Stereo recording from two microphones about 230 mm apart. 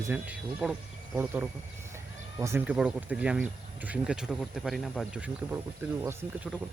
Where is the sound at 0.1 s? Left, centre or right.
Centre.